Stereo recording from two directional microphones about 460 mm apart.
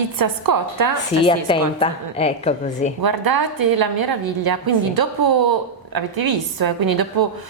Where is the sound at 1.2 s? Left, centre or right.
Centre.